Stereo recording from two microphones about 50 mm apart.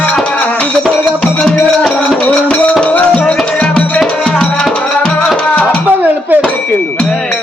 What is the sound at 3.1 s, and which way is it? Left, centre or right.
Music, left.